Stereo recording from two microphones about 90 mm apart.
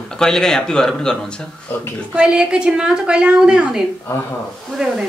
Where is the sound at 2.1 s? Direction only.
10° right (ahead or behind).